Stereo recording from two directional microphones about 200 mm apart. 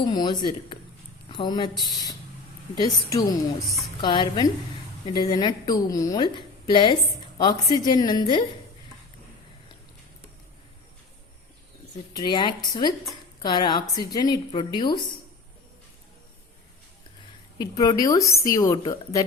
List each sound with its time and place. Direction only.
0.0 s a woman's voice: 20° left (ahead or behind)
12.1 s a woman's voice: 20° left (ahead or behind)
17.6 s a woman's voice: 20° left (ahead or behind)